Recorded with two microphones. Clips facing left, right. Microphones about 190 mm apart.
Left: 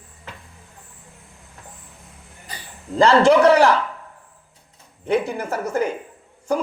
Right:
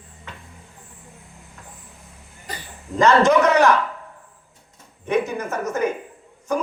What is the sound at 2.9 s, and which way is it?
Speech, 30° left (ahead or behind).